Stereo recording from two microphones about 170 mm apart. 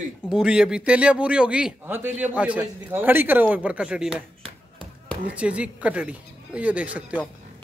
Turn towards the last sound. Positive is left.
turn(degrees=-10)  # may be behind; listen again after turning